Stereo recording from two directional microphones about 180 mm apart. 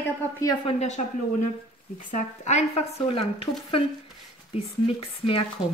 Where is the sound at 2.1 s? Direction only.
40° left (ahead or behind).